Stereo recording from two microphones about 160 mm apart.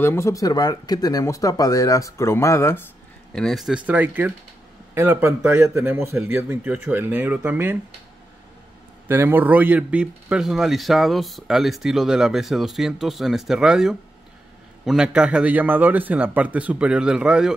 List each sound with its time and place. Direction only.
0.0 s speech: 15° left (ahead or behind)
3.3 s a man's voice: centre (ahead or behind)
9.0 s a man's voice: 15° right (ahead or behind)